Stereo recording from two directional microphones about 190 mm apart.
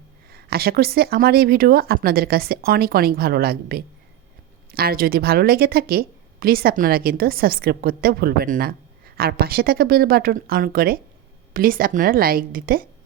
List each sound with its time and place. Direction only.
0.3 s a woman's voice: 55° right (ahead or behind)